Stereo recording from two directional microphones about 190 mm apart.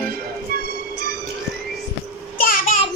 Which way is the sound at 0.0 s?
50° right (ahead or behind).